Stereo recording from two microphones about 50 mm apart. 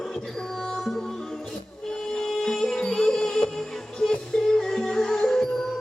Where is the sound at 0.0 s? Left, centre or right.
Centre.